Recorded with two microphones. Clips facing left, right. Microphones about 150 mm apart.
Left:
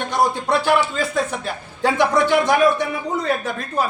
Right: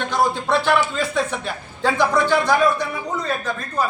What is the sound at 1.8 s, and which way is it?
Speech, 20° left (ahead or behind).